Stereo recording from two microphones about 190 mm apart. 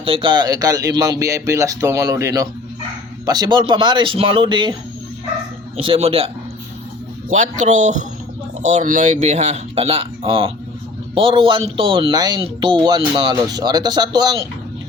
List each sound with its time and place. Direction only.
0.0 s speech: 30° right (ahead or behind)
5.7 s speech: 30° right (ahead or behind)